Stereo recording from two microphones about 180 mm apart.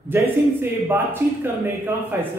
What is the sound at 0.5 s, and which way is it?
Speech, 10° right (ahead or behind).